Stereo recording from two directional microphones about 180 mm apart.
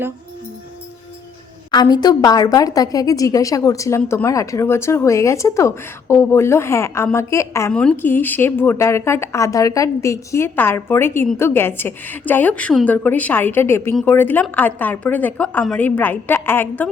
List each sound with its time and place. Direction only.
1.7 s a woman's voice: 25° left (ahead or behind)